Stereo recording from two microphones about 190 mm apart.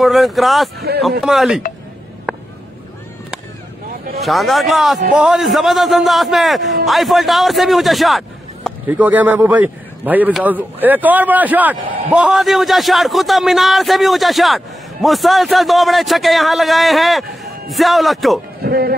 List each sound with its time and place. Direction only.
0.0 s a man's voice: centre (ahead or behind)
2.3 s a sound: 5° right (ahead or behind)
4.2 s a man's voice: centre (ahead or behind)
18.6 s speech: 55° right (ahead or behind)